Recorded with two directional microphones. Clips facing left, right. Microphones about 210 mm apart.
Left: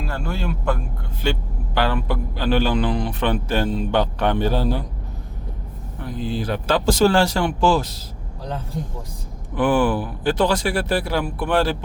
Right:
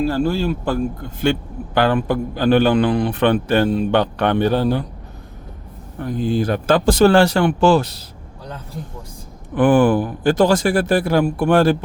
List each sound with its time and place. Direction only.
0.0 s a man's voice: 35° right (ahead or behind)
1.2 s a man's voice: 50° right (ahead or behind)
6.0 s a man's voice: 50° right (ahead or behind)
9.6 s speech: 50° right (ahead or behind)